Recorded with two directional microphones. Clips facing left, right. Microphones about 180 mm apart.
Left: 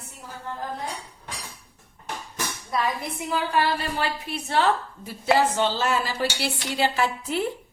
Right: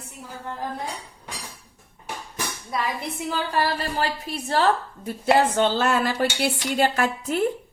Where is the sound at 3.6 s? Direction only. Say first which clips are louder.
Right 1 dB; 40° right (ahead or behind).